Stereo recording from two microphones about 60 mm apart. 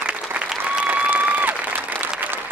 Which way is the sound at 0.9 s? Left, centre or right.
Right.